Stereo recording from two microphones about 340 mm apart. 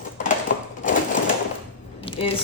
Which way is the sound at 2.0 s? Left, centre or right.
Centre.